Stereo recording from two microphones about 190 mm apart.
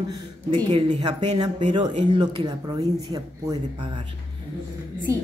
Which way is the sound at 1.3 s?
25° right (ahead or behind).